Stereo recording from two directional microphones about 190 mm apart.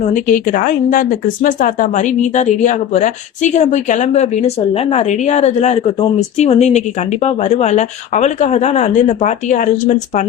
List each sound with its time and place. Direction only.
0.0 s speech: 45° left (ahead or behind)